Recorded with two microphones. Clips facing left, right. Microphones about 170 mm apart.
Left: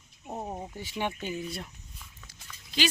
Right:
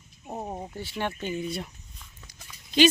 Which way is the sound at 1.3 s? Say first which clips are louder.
Right 4 dB; centre (ahead or behind).